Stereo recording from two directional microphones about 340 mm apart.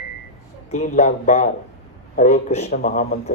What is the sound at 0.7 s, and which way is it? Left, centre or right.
Speech, left.